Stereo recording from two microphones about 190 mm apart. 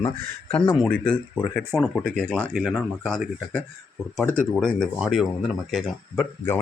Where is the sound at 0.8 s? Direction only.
5° left (ahead or behind).